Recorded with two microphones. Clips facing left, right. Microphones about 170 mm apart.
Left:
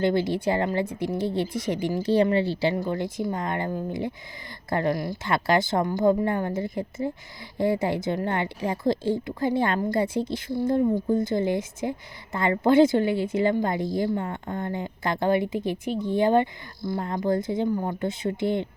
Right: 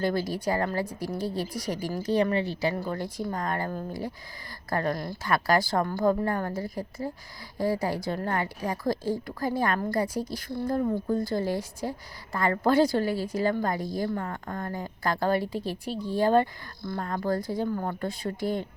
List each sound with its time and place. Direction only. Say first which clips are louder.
0.0 s speech: left 4 dB; 25° left (ahead or behind)